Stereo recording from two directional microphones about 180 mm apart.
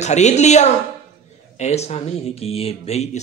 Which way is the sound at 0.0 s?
40° left (ahead or behind).